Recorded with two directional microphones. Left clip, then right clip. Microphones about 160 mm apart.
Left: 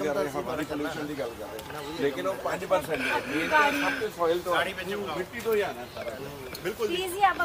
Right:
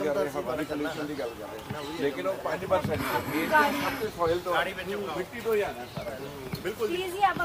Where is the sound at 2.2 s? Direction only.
40° left (ahead or behind).